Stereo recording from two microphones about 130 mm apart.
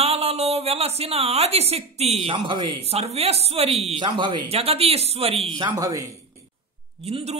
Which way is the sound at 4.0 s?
40° right (ahead or behind).